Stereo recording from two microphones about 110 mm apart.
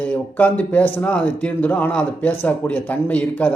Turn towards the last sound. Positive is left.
turn(degrees=15)  # may be behind; listen again after turning